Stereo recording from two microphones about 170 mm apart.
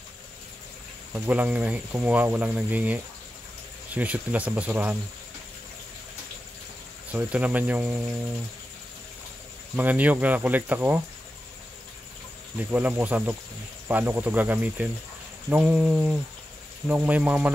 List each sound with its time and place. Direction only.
1.1 s speech: 10° right (ahead or behind)
7.1 s speech: 10° right (ahead or behind)
9.8 s speech: 10° right (ahead or behind)
12.5 s speech: 10° right (ahead or behind)